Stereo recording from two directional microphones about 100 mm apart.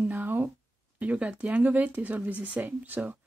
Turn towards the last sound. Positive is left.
turn(degrees=-15)  # may be behind; listen again after turning